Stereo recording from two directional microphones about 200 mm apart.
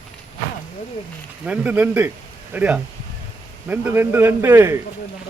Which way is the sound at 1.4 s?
5° right (ahead or behind).